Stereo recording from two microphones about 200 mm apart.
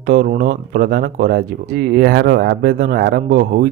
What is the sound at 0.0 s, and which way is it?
Speech, 50° right (ahead or behind).